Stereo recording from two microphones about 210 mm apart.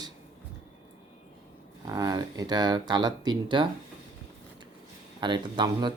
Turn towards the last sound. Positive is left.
turn(degrees=-20)  # may be behind; listen again after turning